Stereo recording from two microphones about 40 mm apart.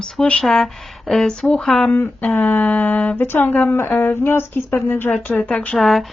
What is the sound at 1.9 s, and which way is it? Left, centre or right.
Speech, left.